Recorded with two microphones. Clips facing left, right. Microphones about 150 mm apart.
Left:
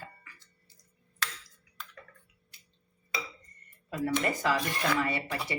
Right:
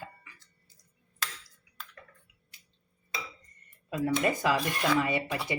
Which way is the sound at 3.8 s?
20° right (ahead or behind).